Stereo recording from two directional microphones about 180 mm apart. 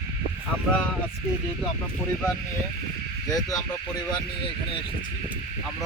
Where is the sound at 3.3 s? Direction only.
20° left (ahead or behind).